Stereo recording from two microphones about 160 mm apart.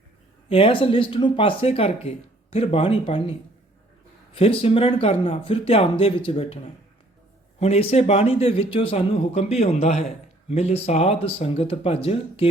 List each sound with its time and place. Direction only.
0.4 s speech: 35° left (ahead or behind)
4.4 s speech: 35° left (ahead or behind)
7.6 s speech: 40° left (ahead or behind)